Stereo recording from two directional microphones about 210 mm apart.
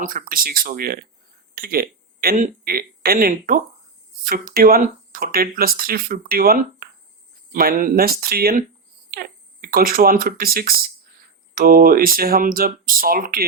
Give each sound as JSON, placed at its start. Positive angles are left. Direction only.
{"t": 0.0, "sound": "speech", "side_deg": -40}